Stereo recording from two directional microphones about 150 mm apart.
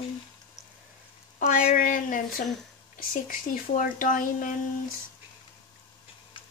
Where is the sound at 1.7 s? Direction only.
60° left (ahead or behind).